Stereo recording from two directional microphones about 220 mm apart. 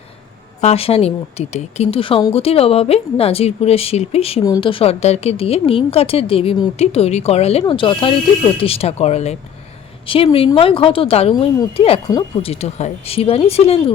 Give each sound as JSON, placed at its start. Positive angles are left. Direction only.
{"t": 0.6, "sound": "a woman's voice", "side_deg": 25}